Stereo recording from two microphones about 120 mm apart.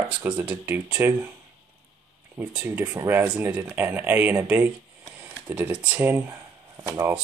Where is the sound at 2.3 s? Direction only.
15° right (ahead or behind).